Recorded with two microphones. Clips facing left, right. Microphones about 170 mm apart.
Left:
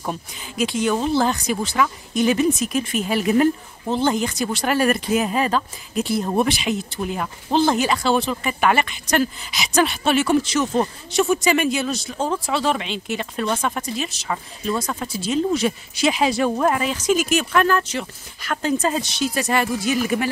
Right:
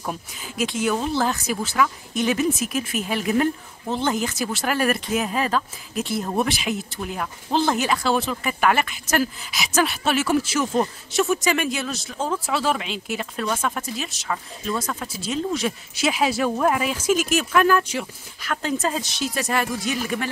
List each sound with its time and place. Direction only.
0.0 s speech: centre (ahead or behind)